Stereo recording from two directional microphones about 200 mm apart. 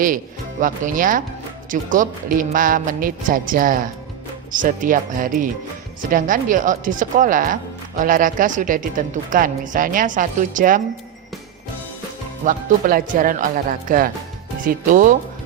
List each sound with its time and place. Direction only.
0.6 s speech: 40° right (ahead or behind)
12.5 s speech: 45° right (ahead or behind)